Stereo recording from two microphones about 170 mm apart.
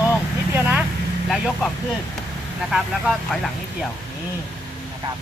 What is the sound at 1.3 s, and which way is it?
Speech, centre (ahead or behind).